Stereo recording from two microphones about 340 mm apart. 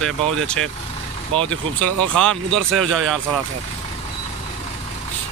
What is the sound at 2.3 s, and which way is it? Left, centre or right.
Speech, right.